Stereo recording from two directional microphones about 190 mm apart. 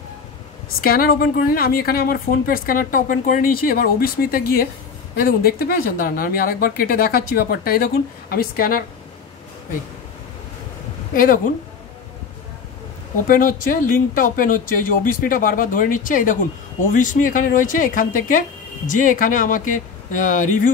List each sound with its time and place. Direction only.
0.8 s speech: 50° left (ahead or behind)
11.1 s speech: 45° left (ahead or behind)
13.3 s speech: 45° left (ahead or behind)